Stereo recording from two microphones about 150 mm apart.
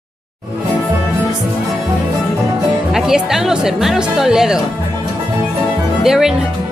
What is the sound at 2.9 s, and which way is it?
Speech, 5° right (ahead or behind).